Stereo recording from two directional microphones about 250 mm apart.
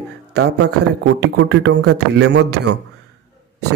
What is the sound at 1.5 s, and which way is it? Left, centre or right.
A man's voice, right.